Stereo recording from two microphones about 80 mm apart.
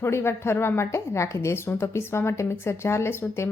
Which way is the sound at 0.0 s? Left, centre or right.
Left.